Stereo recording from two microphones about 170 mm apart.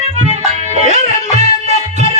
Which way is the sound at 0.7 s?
40° right (ahead or behind).